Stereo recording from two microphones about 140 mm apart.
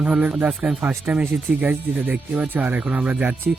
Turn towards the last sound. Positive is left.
turn(degrees=-10)  # may be behind; listen again after turning